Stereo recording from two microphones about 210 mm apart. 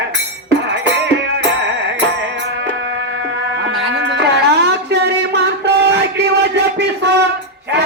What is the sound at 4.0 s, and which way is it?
Music, 55° right (ahead or behind).